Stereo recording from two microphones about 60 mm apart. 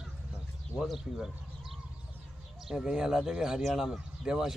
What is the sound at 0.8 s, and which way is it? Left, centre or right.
Speech, centre.